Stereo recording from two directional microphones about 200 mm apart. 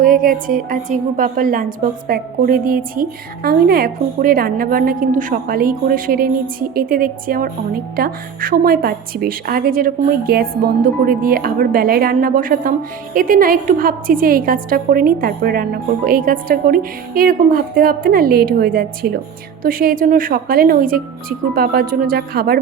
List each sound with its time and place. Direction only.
0.0 s a woman's voice: 45° right (ahead or behind)